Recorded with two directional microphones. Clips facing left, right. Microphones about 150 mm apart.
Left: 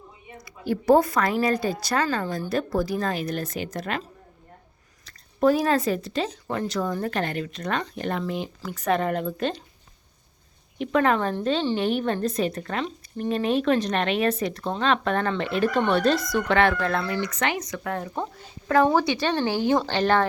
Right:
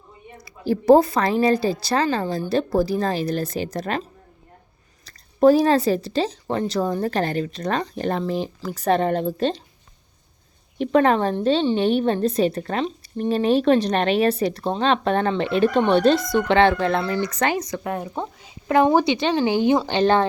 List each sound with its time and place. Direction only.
0.4 s speech: 30° right (ahead or behind)
5.0 s speech: 35° right (ahead or behind)
10.8 s speech: 35° right (ahead or behind)
17.8 s speech: 20° right (ahead or behind)
18.1 s speech: 5° right (ahead or behind)
18.7 s speech: 20° right (ahead or behind)